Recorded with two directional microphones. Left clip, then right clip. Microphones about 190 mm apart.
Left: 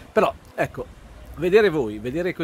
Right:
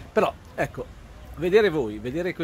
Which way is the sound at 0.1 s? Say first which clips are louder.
Left 3 dB; 15° left (ahead or behind).